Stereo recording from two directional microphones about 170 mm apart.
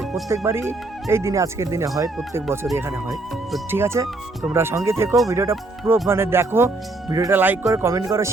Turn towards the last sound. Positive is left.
turn(degrees=-15)  # may be behind; listen again after turning